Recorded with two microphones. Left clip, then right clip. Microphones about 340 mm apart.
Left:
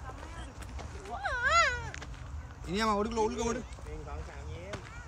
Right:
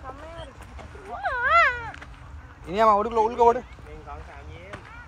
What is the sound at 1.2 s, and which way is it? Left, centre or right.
Cat, centre.